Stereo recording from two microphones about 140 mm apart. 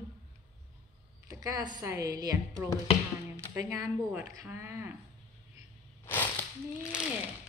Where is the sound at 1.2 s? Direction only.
30° right (ahead or behind).